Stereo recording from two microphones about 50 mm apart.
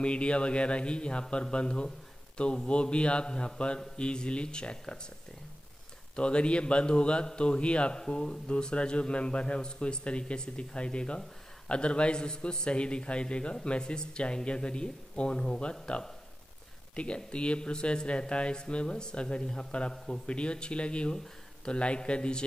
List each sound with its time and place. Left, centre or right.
0.0 s a man's voice: left
6.1 s a man's voice: left